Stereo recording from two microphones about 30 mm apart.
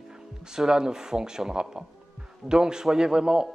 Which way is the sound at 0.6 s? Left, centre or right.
Right.